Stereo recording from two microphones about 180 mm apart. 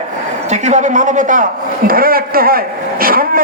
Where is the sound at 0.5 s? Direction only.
40° right (ahead or behind).